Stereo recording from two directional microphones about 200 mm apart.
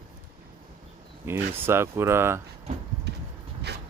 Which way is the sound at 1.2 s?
10° right (ahead or behind).